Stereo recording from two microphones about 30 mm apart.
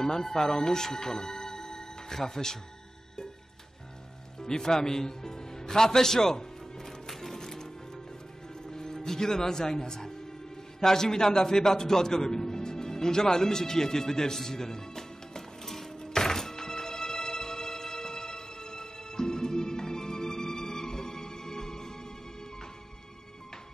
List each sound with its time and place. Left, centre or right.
0.0 s speech: centre
0.9 s music: centre
4.4 s music: left
8.6 s speech: centre
10.8 s music: centre